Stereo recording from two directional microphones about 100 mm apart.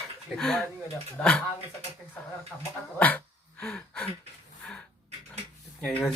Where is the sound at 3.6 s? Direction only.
10° left (ahead or behind).